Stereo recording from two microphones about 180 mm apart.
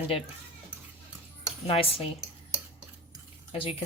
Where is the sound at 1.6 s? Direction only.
35° left (ahead or behind).